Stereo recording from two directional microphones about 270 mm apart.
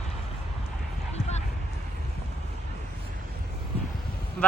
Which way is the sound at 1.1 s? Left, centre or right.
Left.